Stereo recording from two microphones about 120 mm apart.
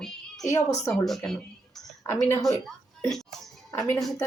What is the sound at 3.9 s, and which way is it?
Speech, 5° left (ahead or behind).